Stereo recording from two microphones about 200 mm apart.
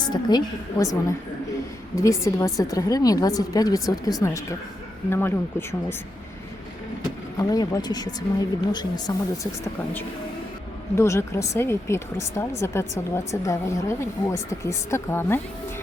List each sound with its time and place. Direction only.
0.0 s a woman's voice: 20° left (ahead or behind)
2.0 s speech: 15° left (ahead or behind)
7.3 s a woman's voice: 20° left (ahead or behind)
10.9 s speech: 15° left (ahead or behind)